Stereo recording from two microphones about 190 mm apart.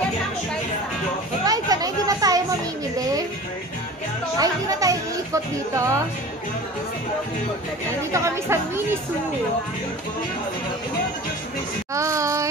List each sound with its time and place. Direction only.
1.4 s chatter: 20° right (ahead or behind)
4.4 s music: 20° right (ahead or behind)
8.1 s speech: 15° right (ahead or behind)
11.9 s a sound: 15° right (ahead or behind)